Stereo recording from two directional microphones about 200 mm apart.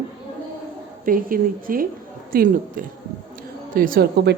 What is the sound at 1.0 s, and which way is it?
A woman's voice, 45° right (ahead or behind).